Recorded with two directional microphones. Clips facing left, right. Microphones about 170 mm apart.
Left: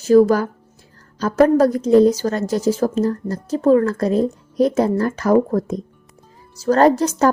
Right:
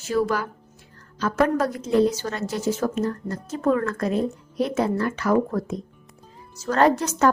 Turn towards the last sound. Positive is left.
turn(degrees=35)  # may be behind; listen again after turning